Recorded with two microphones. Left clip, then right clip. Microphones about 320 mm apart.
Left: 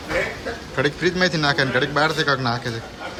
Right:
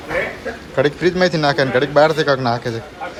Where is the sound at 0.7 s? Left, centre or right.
Centre.